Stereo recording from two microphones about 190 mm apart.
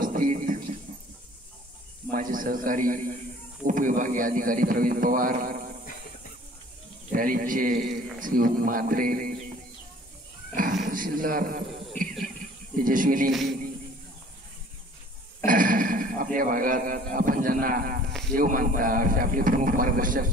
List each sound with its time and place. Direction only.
0.0 s a sound: 45° right (ahead or behind)
2.0 s a man's voice: 50° right (ahead or behind)
7.1 s a man's voice: 45° right (ahead or behind)
10.5 s a sound: 45° right (ahead or behind)
12.7 s a man's voice: 45° right (ahead or behind)
13.3 s music: centre (ahead or behind)
15.4 s a man's voice: 45° right (ahead or behind)